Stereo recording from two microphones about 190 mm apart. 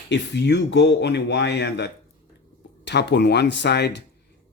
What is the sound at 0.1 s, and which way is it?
Speech, 60° left (ahead or behind).